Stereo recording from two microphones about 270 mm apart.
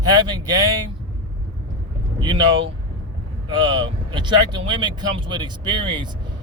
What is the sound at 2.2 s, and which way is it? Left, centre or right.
Speech, centre.